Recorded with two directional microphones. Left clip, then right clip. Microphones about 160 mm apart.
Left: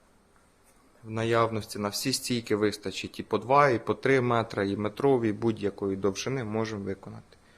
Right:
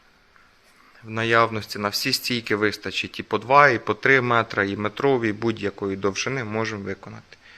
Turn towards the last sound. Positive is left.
turn(degrees=-5)  # may be behind; listen again after turning